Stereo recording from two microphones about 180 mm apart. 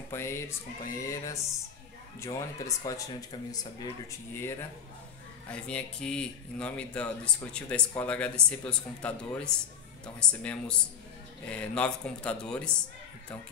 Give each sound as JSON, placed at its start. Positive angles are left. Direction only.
{"t": 0.1, "sound": "a man's voice", "side_deg": 15}